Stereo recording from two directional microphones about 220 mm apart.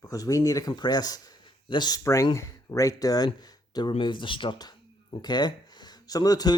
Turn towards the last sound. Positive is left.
turn(degrees=15)  # may be behind; listen again after turning